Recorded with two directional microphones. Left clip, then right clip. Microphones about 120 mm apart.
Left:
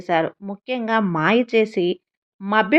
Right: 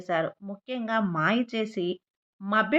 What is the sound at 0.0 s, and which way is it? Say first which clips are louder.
Speech: left 7 dB; 55° left (ahead or behind).